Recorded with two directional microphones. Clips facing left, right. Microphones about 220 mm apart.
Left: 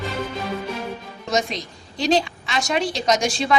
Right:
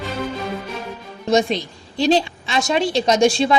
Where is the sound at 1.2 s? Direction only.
30° right (ahead or behind).